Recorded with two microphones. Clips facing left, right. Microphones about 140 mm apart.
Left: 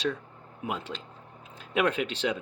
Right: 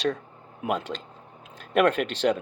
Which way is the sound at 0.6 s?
85° right.